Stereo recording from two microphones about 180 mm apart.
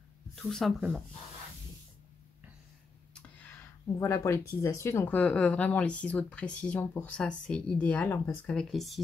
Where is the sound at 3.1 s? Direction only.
10° left (ahead or behind).